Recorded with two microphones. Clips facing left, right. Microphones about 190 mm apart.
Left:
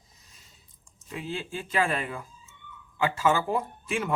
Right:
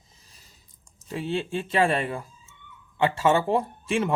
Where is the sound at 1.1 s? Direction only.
30° right (ahead or behind).